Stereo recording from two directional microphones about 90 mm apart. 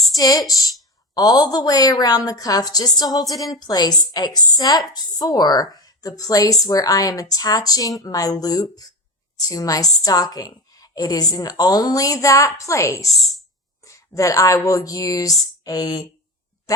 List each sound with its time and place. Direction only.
0.2 s a woman's voice: 40° left (ahead or behind)
13.1 s a woman's voice: centre (ahead or behind)
13.8 s a woman's voice: 35° left (ahead or behind)